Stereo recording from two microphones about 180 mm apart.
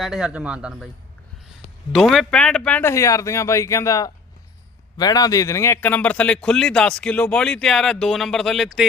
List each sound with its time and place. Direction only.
0.0 s a man's voice: 5° right (ahead or behind)
1.9 s a man's voice: centre (ahead or behind)